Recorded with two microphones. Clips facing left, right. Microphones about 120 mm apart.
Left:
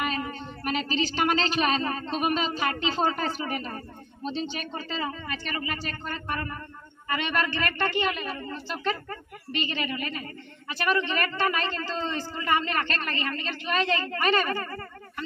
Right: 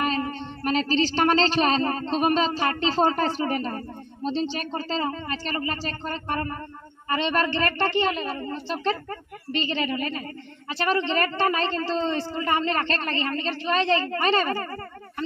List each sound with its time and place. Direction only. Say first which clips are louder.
0.0 s a woman's voice: right 4 dB; 35° right (ahead or behind)